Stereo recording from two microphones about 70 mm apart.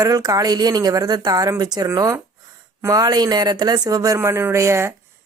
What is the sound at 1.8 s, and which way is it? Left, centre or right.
Speech, right.